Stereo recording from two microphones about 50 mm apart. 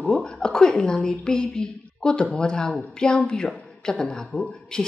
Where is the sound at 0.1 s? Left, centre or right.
Centre.